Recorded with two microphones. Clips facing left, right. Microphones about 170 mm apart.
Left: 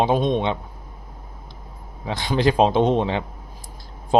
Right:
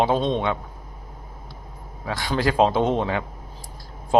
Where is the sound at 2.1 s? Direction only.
20° left (ahead or behind).